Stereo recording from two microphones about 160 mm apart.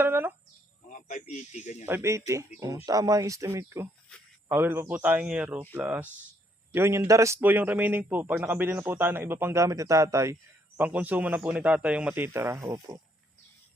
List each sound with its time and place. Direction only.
0.0 s bird: 15° right (ahead or behind)
0.9 s speech: 55° left (ahead or behind)
1.8 s speech: 15° right (ahead or behind)